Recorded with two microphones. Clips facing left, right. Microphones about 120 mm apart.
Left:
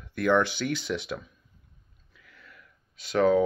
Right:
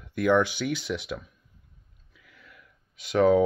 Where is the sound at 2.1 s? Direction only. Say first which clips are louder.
Even; 10° right (ahead or behind).